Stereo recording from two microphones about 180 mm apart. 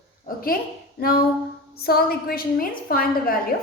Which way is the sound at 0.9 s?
60° left (ahead or behind).